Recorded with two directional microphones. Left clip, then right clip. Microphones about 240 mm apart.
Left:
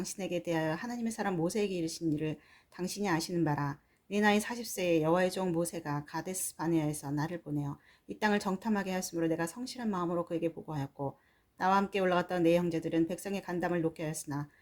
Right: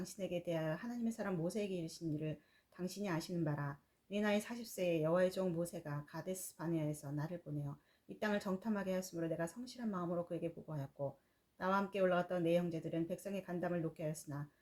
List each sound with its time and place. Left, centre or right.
0.0 s speech: left